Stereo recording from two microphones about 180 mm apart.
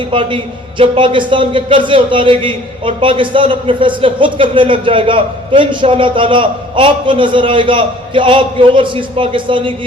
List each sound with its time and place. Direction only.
0.1 s a man's voice: 30° right (ahead or behind)